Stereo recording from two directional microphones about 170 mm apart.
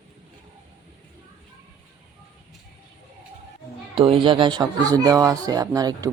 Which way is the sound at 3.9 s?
30° right (ahead or behind).